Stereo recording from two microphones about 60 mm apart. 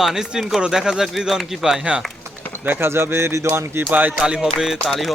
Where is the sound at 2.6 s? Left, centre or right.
Right.